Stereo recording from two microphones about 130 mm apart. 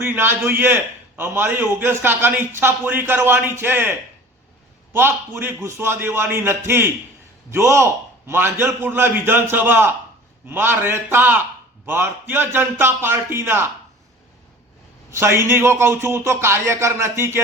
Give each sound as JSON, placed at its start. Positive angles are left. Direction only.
{"t": 0.0, "sound": "a man's voice", "side_deg": -15}
{"t": 4.9, "sound": "a man's voice", "side_deg": -15}
{"t": 15.1, "sound": "a man's voice", "side_deg": -20}